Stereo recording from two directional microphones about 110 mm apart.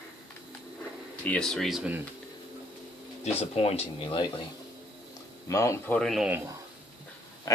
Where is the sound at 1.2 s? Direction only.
10° left (ahead or behind).